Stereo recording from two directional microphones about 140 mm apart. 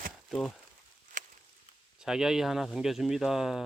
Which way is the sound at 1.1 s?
60° right (ahead or behind).